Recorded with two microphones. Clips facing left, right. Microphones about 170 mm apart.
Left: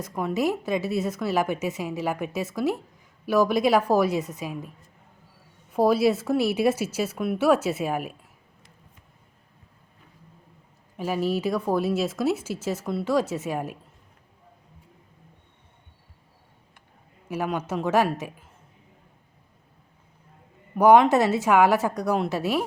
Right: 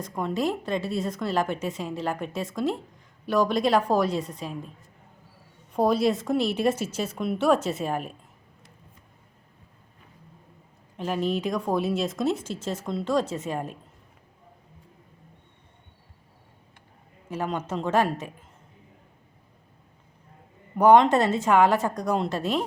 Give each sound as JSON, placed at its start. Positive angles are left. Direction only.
{"t": 0.0, "sound": "a woman's voice", "side_deg": 5}
{"t": 5.7, "sound": "a woman's voice", "side_deg": 5}
{"t": 10.9, "sound": "speech", "side_deg": 5}
{"t": 17.2, "sound": "a woman's voice", "side_deg": 10}
{"t": 20.7, "sound": "a woman's voice", "side_deg": 10}